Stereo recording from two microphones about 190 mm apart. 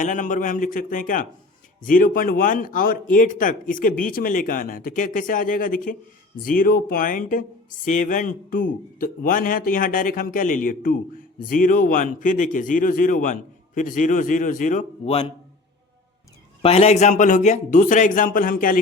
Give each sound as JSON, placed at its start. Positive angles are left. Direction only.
{"t": 0.0, "sound": "speech", "side_deg": 40}
{"t": 16.6, "sound": "speech", "side_deg": 35}